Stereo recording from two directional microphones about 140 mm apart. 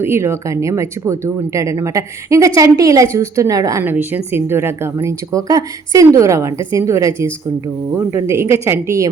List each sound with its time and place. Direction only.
0.0 s a woman's voice: 20° right (ahead or behind)